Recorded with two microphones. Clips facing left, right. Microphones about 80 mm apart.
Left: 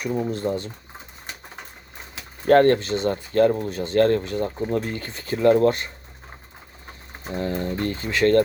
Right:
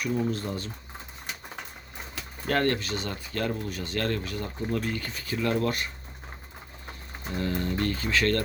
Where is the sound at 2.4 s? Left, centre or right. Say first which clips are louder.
Left 11 dB; left.